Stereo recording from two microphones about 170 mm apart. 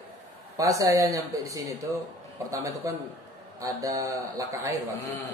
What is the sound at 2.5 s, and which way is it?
A man's voice, 20° right (ahead or behind).